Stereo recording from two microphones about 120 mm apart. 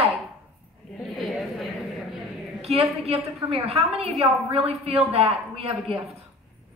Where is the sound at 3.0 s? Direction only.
60° right (ahead or behind).